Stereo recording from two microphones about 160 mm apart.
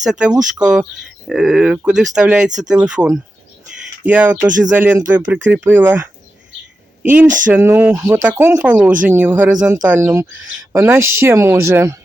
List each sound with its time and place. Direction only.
0.0 s speech: 5° right (ahead or behind)